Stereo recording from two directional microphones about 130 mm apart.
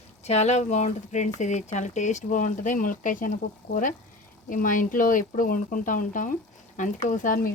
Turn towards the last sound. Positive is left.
turn(degrees=90)